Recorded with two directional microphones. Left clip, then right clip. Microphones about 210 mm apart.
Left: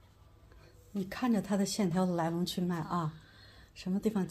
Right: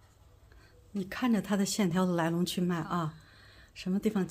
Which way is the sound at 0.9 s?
10° right (ahead or behind).